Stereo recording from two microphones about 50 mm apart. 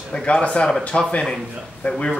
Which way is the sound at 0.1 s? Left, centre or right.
Left.